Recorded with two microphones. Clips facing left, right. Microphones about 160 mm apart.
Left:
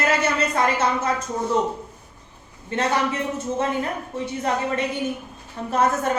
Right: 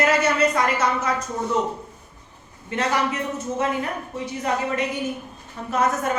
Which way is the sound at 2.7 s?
30° left (ahead or behind).